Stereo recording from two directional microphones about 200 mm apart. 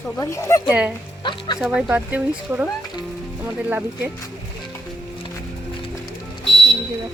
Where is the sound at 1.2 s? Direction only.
25° left (ahead or behind).